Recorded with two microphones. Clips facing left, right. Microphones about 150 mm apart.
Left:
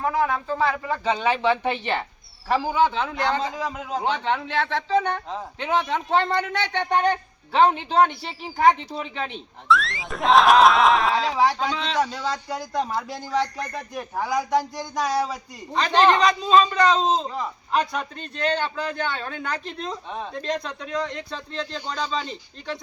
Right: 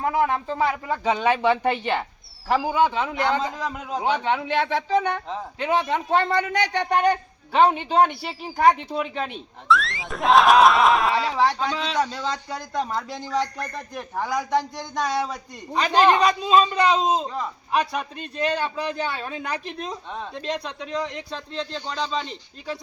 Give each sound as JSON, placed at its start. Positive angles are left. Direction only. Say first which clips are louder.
{"t": 0.1, "sound": "a man's voice", "louder": "right 1 dB", "side_deg": -20}
{"t": 3.5, "sound": "a man's voice", "louder": "left 1 dB", "side_deg": 0}
{"t": 15.7, "sound": "a man's voice", "louder": "even", "side_deg": -10}